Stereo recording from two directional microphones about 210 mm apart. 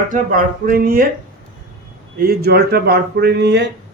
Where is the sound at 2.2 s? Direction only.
45° right (ahead or behind).